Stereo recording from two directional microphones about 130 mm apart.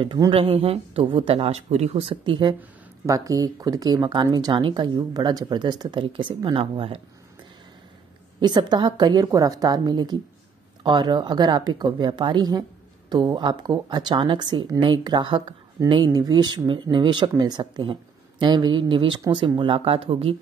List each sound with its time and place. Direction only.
0.3 s speech: 50° right (ahead or behind)
3.1 s speech: 25° right (ahead or behind); by 7.0 s 45° right (ahead or behind)
8.4 s speech: 35° right (ahead or behind)